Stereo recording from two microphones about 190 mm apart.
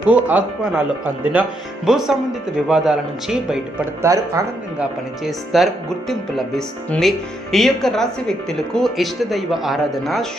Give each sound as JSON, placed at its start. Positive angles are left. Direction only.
{"t": 0.0, "sound": "speech", "side_deg": -10}
{"t": 4.0, "sound": "speech", "side_deg": -20}
{"t": 4.8, "sound": "speech", "side_deg": 0}